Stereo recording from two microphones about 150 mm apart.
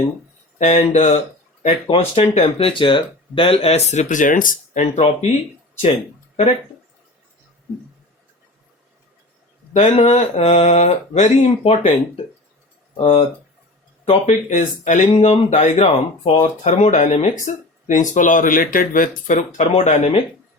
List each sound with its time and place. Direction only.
0.6 s speech: 50° left (ahead or behind)
9.7 s speech: 45° left (ahead or behind)